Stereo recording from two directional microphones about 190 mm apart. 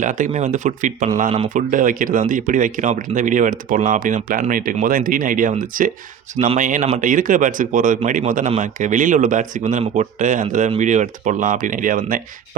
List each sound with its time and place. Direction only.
0.0 s speech: 40° right (ahead or behind)
1.3 s speech: 30° right (ahead or behind)
1.7 s speech: 45° right (ahead or behind)